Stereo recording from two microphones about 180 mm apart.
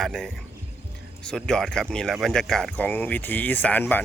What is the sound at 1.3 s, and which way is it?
Speech, centre (ahead or behind).